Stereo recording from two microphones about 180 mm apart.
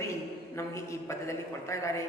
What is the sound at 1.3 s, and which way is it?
Speech, 15° left (ahead or behind).